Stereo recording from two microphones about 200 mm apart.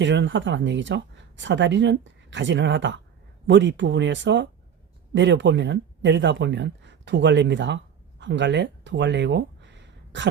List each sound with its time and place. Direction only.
0.0 s speech: 65° right (ahead or behind)